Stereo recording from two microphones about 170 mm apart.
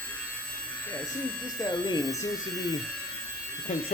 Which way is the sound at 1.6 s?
25° left (ahead or behind).